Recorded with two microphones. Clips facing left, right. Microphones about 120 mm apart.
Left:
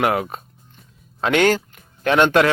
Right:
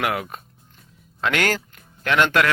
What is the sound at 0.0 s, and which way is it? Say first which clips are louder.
Speech: left 5 dB; 30° left (ahead or behind).